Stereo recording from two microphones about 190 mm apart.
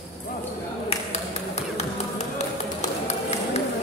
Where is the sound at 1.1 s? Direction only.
35° left (ahead or behind).